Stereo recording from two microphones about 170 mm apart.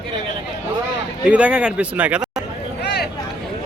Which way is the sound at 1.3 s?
10° right (ahead or behind).